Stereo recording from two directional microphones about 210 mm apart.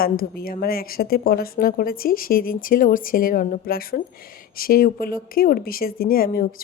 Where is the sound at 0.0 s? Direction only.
45° left (ahead or behind).